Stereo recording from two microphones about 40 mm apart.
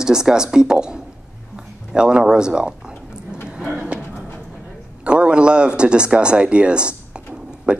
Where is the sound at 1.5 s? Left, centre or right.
Right.